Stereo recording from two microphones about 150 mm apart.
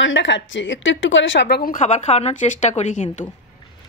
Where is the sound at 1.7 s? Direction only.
50° left (ahead or behind).